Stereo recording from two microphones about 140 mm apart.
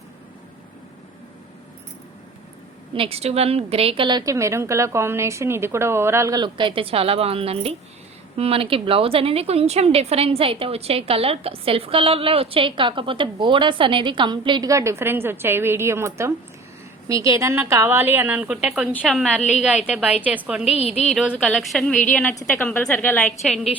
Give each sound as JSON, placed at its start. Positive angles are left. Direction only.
{"t": 2.9, "sound": "a woman's voice", "side_deg": -45}
{"t": 4.2, "sound": "a woman's voice", "side_deg": -20}
{"t": 14.7, "sound": "a woman's voice", "side_deg": -20}
{"t": 19.6, "sound": "a woman's voice", "side_deg": -10}
{"t": 20.7, "sound": "speech", "side_deg": 45}
{"t": 21.0, "sound": "a woman's voice", "side_deg": 0}